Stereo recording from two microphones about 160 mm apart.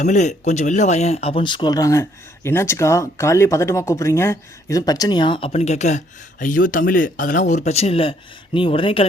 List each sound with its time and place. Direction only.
0.0 s speech: 45° left (ahead or behind); by 5.5 s 30° left (ahead or behind)
5.5 s speech: 45° left (ahead or behind)